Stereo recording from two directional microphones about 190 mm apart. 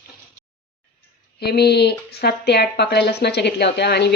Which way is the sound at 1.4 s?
60° left (ahead or behind).